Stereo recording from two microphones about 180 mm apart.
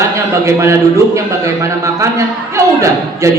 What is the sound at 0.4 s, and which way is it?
A man's voice, 15° right (ahead or behind).